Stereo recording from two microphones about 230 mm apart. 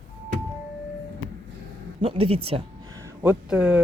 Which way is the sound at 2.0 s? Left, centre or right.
Right.